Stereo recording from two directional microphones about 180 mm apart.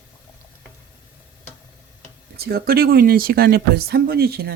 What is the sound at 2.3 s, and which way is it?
Speech, 60° right (ahead or behind).